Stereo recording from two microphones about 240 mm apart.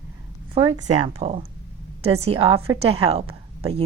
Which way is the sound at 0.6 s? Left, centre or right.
Right.